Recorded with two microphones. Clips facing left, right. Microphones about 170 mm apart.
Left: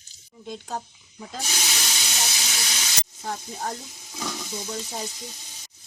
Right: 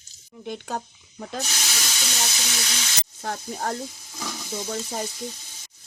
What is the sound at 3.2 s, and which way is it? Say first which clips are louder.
Speech: right 2 dB; 60° right (ahead or behind).